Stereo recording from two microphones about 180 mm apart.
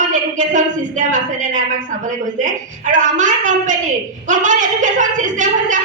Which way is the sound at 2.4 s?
45° right (ahead or behind).